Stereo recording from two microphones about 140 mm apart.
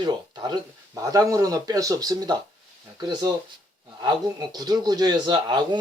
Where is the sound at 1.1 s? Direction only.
25° right (ahead or behind).